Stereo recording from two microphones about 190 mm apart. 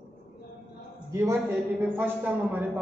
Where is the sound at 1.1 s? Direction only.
15° right (ahead or behind).